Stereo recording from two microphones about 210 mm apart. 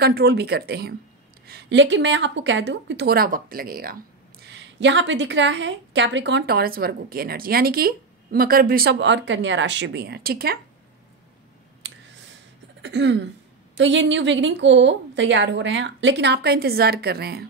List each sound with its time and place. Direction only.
0.0 s a woman's voice: 50° right (ahead or behind)
11.8 s a sound: 60° right (ahead or behind)
12.8 s a woman's voice: 60° right (ahead or behind)